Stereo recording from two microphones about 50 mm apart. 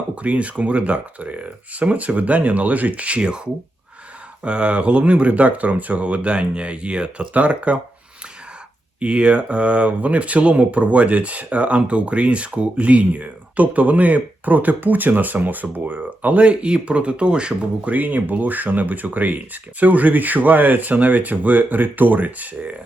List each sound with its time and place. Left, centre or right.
0.2 s speech: right
9.0 s speech: right
17.8 s speech: right